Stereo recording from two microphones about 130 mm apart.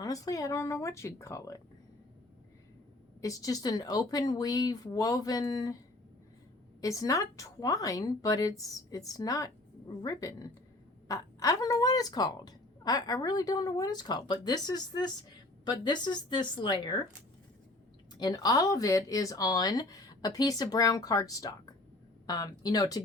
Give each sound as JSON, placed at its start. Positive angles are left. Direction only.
{"t": 0.0, "sound": "a woman's voice", "side_deg": 25}
{"t": 3.2, "sound": "a woman's voice", "side_deg": 25}
{"t": 6.8, "sound": "a woman's voice", "side_deg": 25}
{"t": 18.2, "sound": "a woman's voice", "side_deg": 30}